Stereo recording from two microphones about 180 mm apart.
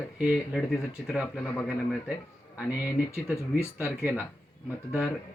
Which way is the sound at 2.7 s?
10° right (ahead or behind).